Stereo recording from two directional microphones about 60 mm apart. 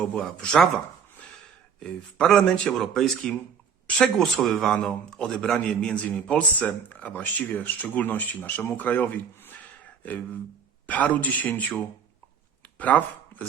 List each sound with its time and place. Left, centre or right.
0.0 s speech: centre
1.8 s speech: centre
4.8 s a man's voice: centre
10.8 s a man's voice: left
12.9 s a man's voice: left
13.3 s dog: left